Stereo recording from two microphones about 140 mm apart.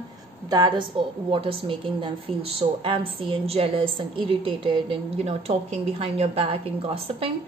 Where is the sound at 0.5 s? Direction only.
30° right (ahead or behind).